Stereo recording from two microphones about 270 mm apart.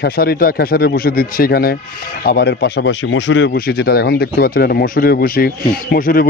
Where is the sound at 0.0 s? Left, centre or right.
Left.